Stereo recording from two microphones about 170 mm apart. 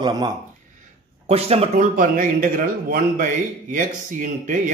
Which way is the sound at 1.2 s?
35° right (ahead or behind).